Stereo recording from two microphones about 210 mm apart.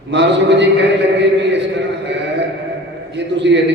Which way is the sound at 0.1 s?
55° right (ahead or behind).